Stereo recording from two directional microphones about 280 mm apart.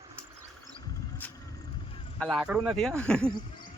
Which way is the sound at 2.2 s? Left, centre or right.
Centre.